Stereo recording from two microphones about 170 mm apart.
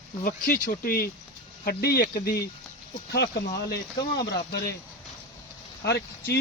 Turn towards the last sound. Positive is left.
turn(degrees=75)  # may be behind; listen again after turning